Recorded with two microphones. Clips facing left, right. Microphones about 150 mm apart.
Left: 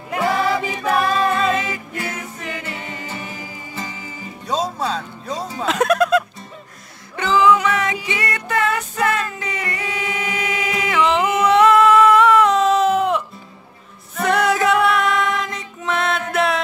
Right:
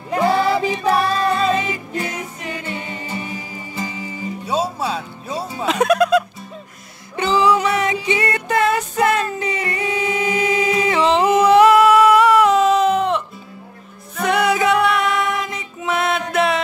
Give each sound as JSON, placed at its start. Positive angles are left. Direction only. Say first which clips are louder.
{"t": 0.1, "sound": "music", "louder": "right 3 dB", "side_deg": -30}
{"t": 1.7, "sound": "music", "louder": "right 3 dB", "side_deg": -20}
{"t": 7.2, "sound": "music", "louder": "left 1 dB", "side_deg": -25}
{"t": 8.7, "sound": "a capella", "louder": "right 3 dB", "side_deg": -25}
{"t": 11.6, "sound": "a sound", "louder": "right 1 dB", "side_deg": -5}
{"t": 14.1, "sound": "music", "louder": "even", "side_deg": 0}